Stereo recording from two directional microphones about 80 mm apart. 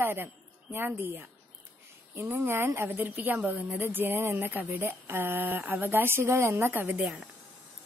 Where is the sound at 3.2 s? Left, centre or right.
Centre.